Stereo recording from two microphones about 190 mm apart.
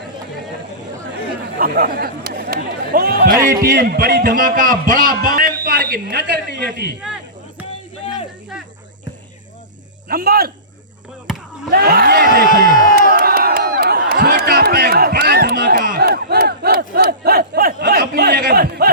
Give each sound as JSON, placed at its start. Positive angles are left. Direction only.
{"t": 1.5, "sound": "chatter", "side_deg": -50}
{"t": 3.4, "sound": "a man's voice", "side_deg": -50}
{"t": 10.1, "sound": "speech", "side_deg": -50}
{"t": 11.3, "sound": "chop", "side_deg": 0}
{"t": 11.7, "sound": "speech", "side_deg": -55}
{"t": 12.5, "sound": "a sound", "side_deg": -55}